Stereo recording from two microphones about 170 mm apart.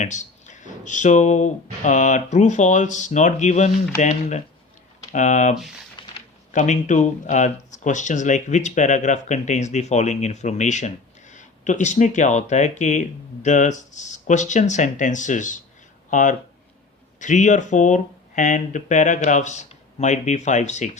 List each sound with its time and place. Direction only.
0.0 s speech: 45° left (ahead or behind)
6.0 s a sound: 30° left (ahead or behind)
6.5 s speech: 45° left (ahead or behind)